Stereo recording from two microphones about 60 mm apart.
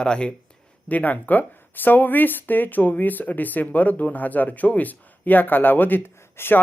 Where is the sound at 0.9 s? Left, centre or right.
Left.